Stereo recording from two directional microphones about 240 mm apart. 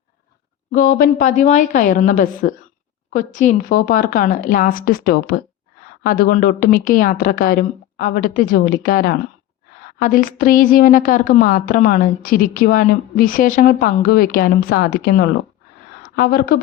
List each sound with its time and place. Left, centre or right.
0.7 s a woman's voice: left